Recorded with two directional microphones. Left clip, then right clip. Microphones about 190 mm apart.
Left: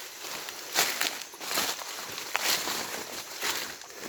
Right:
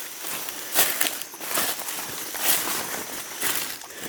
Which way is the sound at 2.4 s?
55° right (ahead or behind).